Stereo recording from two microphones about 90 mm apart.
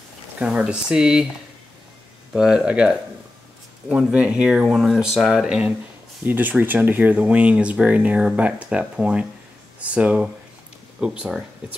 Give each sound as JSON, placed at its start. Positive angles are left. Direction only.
{"t": 0.4, "sound": "speech", "side_deg": -10}
{"t": 2.3, "sound": "speech", "side_deg": -10}
{"t": 6.2, "sound": "speech", "side_deg": -20}